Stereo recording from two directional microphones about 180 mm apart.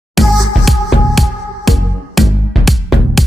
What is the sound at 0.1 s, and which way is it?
Music, centre (ahead or behind).